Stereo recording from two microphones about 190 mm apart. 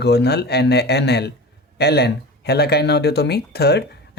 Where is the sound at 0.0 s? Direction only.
60° left (ahead or behind).